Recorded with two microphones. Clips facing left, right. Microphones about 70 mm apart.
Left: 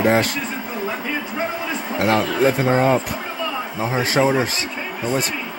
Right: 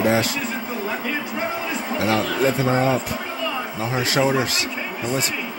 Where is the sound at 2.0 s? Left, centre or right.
Left.